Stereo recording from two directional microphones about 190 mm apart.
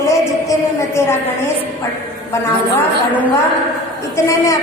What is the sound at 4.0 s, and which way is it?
Speech, 15° left (ahead or behind).